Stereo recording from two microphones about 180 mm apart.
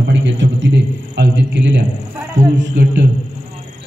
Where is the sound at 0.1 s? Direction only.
90° right.